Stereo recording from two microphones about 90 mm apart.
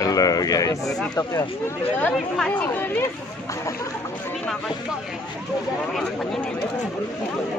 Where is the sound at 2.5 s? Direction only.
20° left (ahead or behind).